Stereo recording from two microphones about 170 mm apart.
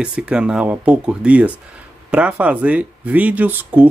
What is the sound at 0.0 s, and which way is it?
A man's voice, 5° right (ahead or behind).